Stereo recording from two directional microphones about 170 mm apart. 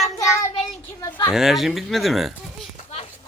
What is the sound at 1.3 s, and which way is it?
Speech, centre (ahead or behind).